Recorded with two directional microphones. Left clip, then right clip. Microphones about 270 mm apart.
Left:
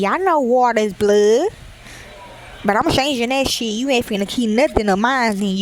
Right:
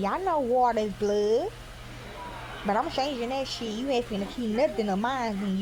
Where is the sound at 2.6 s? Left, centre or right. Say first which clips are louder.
Left 11 dB; left.